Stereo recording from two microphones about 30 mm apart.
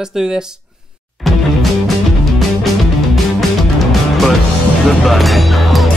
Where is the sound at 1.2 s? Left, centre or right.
Centre.